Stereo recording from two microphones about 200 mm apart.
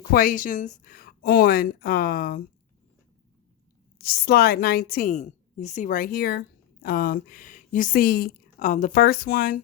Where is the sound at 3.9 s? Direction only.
50° left (ahead or behind).